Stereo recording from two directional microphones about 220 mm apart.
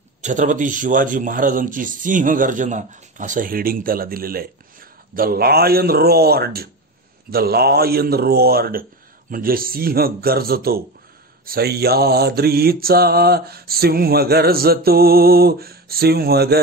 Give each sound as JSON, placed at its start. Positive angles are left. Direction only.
{"t": 0.2, "sound": "speech", "side_deg": -35}
{"t": 7.2, "sound": "mantra", "side_deg": -45}